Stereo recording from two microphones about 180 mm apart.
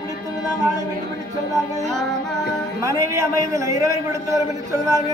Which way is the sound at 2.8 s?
15° right (ahead or behind).